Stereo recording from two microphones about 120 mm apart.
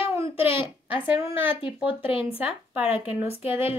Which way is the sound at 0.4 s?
50° left (ahead or behind).